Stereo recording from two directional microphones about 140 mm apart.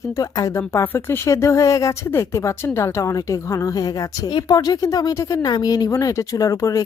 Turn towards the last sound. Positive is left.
turn(degrees=25)  # may be behind; listen again after turning